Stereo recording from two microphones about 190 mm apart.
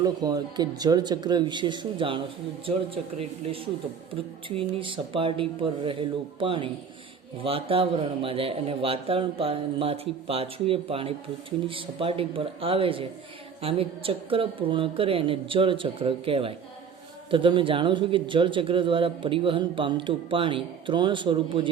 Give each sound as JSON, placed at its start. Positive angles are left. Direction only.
{"t": 0.0, "sound": "a man's voice", "side_deg": -20}